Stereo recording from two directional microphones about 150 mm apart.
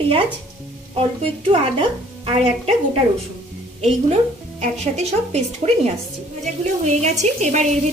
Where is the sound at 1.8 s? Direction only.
35° right (ahead or behind).